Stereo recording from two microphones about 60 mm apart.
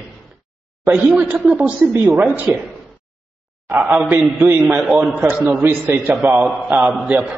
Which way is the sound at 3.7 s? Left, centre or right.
Right.